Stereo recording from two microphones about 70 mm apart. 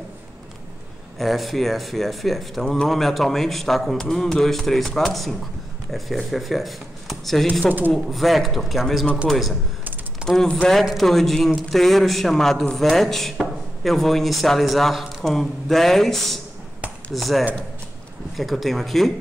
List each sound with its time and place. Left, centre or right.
1.1 s speech: centre
7.6 s speech: right
7.9 s speech: centre